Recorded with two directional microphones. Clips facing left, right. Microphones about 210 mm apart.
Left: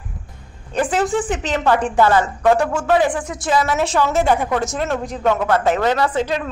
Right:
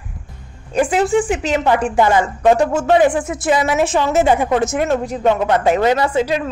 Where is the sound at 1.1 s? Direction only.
10° right (ahead or behind).